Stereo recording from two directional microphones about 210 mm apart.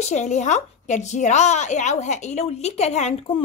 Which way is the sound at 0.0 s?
35° left (ahead or behind).